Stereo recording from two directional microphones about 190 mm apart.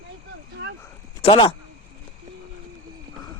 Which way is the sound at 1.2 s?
30° left (ahead or behind).